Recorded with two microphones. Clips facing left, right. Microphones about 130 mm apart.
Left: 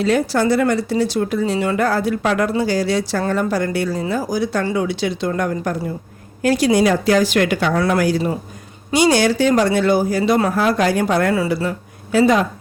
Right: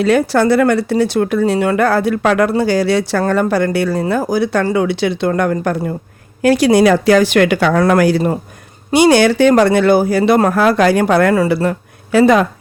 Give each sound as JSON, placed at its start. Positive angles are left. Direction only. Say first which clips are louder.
{"t": 0.0, "sound": "speech", "louder": "right 4 dB", "side_deg": -65}
{"t": 7.9, "sound": "speech", "louder": "right 5 dB", "side_deg": -70}